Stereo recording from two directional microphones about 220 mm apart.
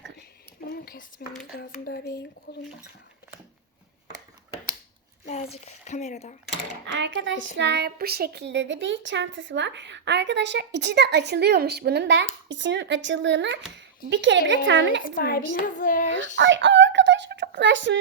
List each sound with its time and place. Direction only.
1.2 s speech: 45° left (ahead or behind)
5.3 s speech: 30° left (ahead or behind)
6.8 s a woman's voice: 55° right (ahead or behind)
15.1 s speech: 45° left (ahead or behind)
16.4 s a sound: 55° right (ahead or behind)